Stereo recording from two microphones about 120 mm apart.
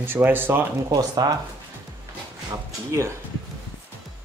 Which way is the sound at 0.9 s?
35° right (ahead or behind).